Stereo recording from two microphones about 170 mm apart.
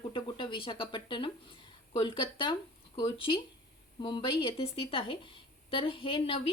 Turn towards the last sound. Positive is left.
turn(degrees=35)  # may be behind; listen again after turning